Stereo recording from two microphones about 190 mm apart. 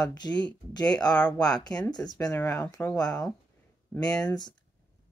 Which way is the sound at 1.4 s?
20° left (ahead or behind).